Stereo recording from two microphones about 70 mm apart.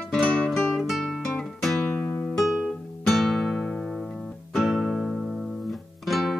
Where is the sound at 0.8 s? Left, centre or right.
Centre.